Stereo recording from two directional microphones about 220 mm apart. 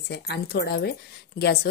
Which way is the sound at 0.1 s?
50° left (ahead or behind).